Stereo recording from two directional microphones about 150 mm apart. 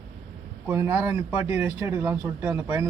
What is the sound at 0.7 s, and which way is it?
Speech, 15° right (ahead or behind).